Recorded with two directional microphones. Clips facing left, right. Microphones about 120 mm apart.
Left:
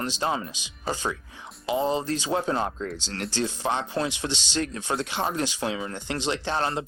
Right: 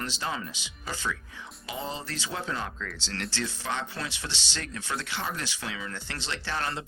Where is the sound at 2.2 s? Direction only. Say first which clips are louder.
Left 5 dB; 40° left (ahead or behind).